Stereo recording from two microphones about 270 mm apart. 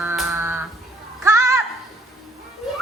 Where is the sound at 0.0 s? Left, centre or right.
Centre.